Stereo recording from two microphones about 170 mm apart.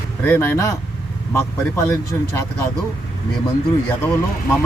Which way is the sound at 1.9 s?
15° left (ahead or behind).